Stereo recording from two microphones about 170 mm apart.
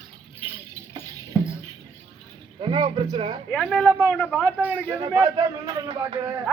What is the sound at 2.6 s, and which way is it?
Speech, 25° right (ahead or behind).